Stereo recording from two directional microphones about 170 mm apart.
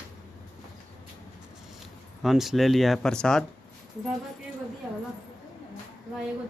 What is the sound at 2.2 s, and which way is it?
Speech, centre (ahead or behind).